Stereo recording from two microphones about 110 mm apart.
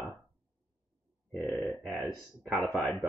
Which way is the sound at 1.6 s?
Centre (ahead or behind).